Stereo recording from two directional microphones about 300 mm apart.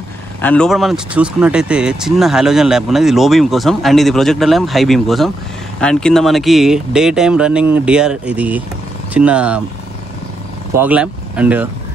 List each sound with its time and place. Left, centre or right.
0.4 s speech: centre
10.8 s speech: centre